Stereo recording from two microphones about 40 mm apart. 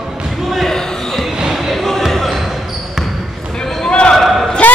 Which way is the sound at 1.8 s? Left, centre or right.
Centre.